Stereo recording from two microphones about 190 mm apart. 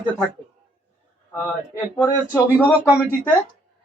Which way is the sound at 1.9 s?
10° left (ahead or behind).